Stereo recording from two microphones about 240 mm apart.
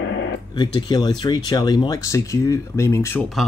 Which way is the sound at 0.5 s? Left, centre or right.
Centre.